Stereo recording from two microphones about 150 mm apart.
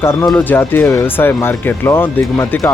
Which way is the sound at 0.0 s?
15° left (ahead or behind).